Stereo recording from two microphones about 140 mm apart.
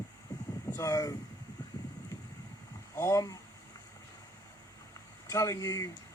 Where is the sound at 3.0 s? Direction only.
20° left (ahead or behind).